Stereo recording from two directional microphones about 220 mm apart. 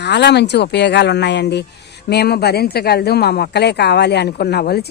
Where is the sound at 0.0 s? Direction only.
50° left (ahead or behind).